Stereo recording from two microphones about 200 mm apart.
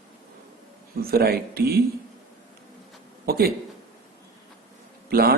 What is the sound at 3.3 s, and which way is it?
Speech, 50° right (ahead or behind).